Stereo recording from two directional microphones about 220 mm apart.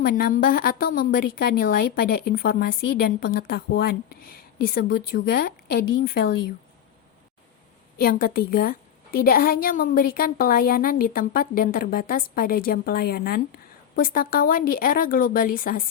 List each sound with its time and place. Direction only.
0.0 s a woman's voice: 40° left (ahead or behind)
7.9 s a woman's voice: 40° left (ahead or behind)